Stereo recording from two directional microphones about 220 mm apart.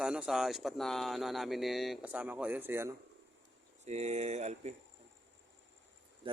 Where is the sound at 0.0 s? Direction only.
5° right (ahead or behind).